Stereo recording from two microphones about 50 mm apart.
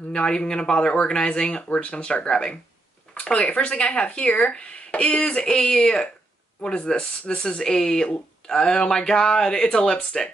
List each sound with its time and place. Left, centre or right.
0.1 s speech: centre